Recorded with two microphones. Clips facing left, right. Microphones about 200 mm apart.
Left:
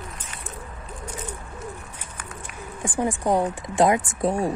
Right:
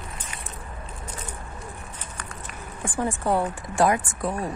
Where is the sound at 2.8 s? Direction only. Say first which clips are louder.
Left 2 dB; 15° left (ahead or behind).